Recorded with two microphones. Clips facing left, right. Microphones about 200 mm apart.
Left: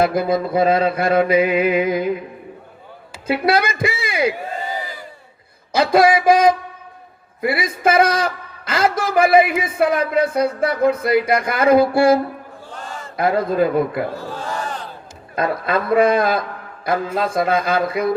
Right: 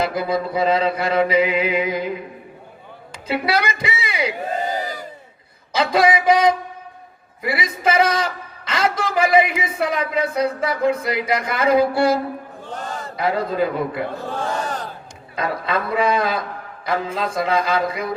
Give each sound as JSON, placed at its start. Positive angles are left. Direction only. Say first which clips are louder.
{"t": 0.0, "sound": "speech", "louder": "left 4 dB", "side_deg": 50}
{"t": 3.2, "sound": "speech", "louder": "left 3 dB", "side_deg": 50}
{"t": 4.8, "sound": "crowd", "louder": "right 4 dB", "side_deg": -40}
{"t": 5.7, "sound": "speech", "louder": "left 3 dB", "side_deg": 50}
{"t": 7.6, "sound": "a man's voice", "louder": "left 2 dB", "side_deg": 50}
{"t": 12.7, "sound": "a sound", "louder": "right 4 dB", "side_deg": -40}
{"t": 13.1, "sound": "speech", "louder": "left 4 dB", "side_deg": 50}
{"t": 15.4, "sound": "speech", "louder": "left 3 dB", "side_deg": 50}